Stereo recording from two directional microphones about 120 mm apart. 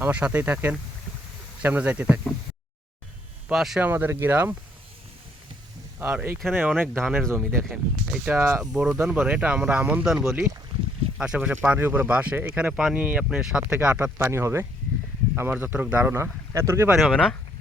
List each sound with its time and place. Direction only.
0.0 s speech: 10° right (ahead or behind)
3.5 s speech: centre (ahead or behind)
3.8 s speech: 15° right (ahead or behind)
6.0 s speech: 15° right (ahead or behind)
8.6 s speech: 5° right (ahead or behind); by 17.0 s 20° right (ahead or behind)
17.0 s speech: 5° right (ahead or behind)